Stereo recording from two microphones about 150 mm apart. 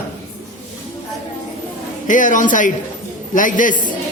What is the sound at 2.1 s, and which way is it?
A man's voice, 60° left (ahead or behind).